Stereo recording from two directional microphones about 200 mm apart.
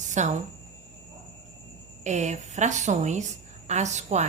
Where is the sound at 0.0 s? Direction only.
35° right (ahead or behind).